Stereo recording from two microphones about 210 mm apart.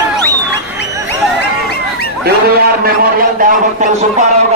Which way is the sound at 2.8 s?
45° right (ahead or behind).